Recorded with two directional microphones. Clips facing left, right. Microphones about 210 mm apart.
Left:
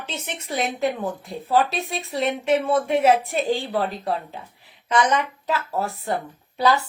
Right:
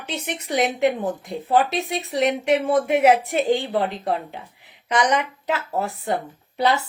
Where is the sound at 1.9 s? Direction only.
20° right (ahead or behind).